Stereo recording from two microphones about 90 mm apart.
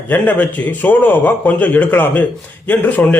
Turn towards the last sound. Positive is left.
turn(degrees=20)  # may be behind; listen again after turning